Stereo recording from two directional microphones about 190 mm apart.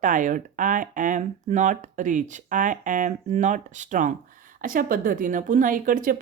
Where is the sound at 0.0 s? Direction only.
45° right (ahead or behind).